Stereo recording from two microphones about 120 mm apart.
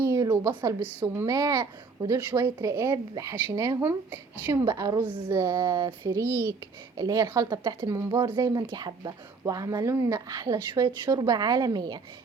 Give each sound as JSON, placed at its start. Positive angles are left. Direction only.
{"t": 0.0, "sound": "a sound", "side_deg": -25}
{"t": 1.1, "sound": "speech", "side_deg": -25}
{"t": 4.6, "sound": "speech", "side_deg": -30}
{"t": 5.0, "sound": "speech", "side_deg": -10}
{"t": 5.4, "sound": "speech", "side_deg": -30}